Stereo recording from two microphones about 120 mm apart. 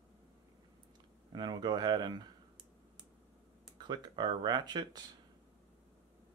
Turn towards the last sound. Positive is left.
turn(degrees=-35)  # may be behind; listen again after turning